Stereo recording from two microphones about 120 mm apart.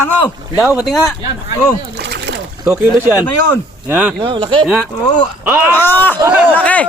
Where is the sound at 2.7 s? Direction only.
15° right (ahead or behind).